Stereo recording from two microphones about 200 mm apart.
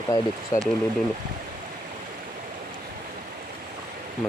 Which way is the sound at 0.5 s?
15° left (ahead or behind).